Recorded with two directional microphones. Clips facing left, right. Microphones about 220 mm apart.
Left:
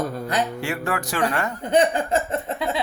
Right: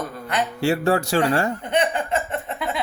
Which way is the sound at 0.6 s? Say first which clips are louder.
Right 7 dB; 30° right (ahead or behind).